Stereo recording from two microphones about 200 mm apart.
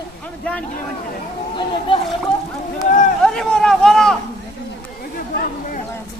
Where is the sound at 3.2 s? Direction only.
Centre (ahead or behind).